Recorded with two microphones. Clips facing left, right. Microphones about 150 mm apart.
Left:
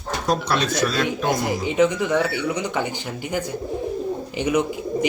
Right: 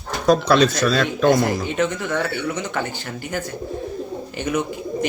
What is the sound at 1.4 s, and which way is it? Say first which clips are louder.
Speech: left 2 dB; 15° left (ahead or behind).